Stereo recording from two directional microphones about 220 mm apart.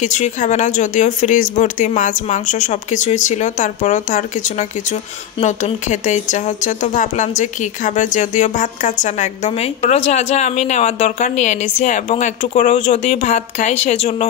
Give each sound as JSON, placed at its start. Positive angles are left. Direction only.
{"t": 0.0, "sound": "speech", "side_deg": 35}